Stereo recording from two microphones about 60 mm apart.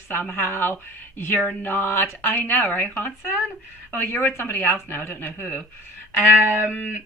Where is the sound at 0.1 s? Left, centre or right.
Left.